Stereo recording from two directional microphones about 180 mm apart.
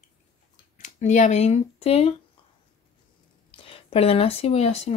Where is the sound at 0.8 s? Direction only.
40° left (ahead or behind).